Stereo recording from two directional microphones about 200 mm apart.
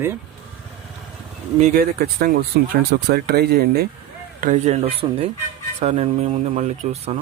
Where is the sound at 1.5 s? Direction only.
40° right (ahead or behind).